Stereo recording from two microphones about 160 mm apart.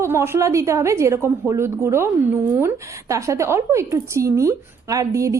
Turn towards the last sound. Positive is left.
turn(degrees=-20)  # may be behind; listen again after turning